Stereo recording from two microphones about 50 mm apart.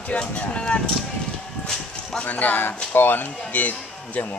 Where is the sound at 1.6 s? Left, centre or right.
Centre.